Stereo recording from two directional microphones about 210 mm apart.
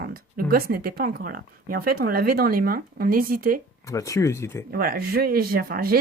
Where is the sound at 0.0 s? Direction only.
45° right (ahead or behind).